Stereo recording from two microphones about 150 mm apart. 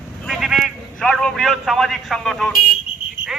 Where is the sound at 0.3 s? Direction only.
5° right (ahead or behind).